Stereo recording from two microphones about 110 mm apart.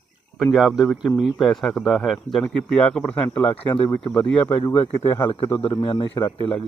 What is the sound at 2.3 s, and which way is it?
Speech, 10° left (ahead or behind).